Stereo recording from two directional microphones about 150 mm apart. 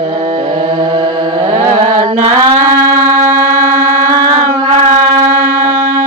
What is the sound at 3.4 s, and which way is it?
Music, 55° right (ahead or behind).